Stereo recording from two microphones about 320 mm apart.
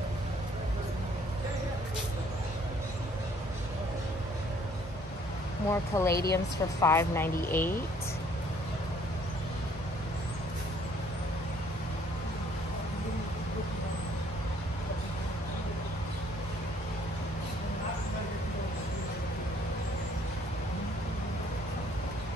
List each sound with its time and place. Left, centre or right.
5.7 s speech: centre
6.1 s a woman's voice: left
6.8 s speech: centre